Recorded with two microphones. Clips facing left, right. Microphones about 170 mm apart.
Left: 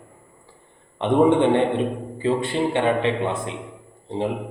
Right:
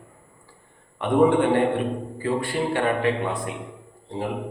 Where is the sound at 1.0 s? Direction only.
20° left (ahead or behind).